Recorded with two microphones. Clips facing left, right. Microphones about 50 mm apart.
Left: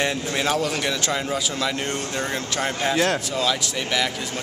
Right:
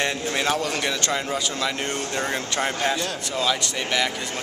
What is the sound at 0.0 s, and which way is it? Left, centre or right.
A man's voice, centre.